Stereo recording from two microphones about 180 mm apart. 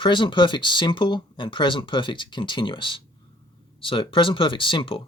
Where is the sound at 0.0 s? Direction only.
25° left (ahead or behind).